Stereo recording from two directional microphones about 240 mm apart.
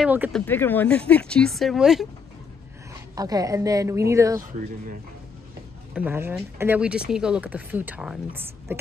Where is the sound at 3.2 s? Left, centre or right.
Centre.